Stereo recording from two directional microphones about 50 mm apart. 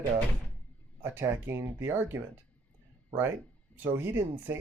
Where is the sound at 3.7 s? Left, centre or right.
Right.